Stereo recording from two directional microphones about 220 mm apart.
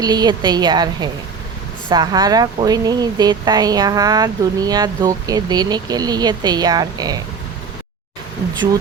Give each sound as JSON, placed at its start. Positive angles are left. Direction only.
{"t": 0.0, "sound": "a woman's voice", "side_deg": -20}